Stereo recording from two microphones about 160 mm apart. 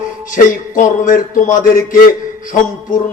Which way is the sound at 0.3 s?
55° left (ahead or behind).